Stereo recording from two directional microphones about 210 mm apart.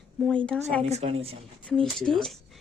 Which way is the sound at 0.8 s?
30° right (ahead or behind).